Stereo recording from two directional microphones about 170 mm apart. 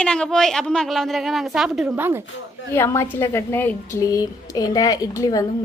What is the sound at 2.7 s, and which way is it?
A woman's voice, 15° left (ahead or behind).